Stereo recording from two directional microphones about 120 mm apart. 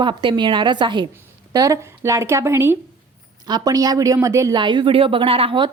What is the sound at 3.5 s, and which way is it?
A woman's voice, 30° right (ahead or behind).